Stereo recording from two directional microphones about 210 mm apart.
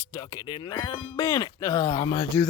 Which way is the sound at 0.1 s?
15° left (ahead or behind).